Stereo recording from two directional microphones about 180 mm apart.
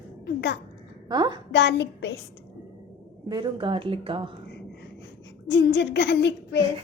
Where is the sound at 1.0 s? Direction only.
25° right (ahead or behind).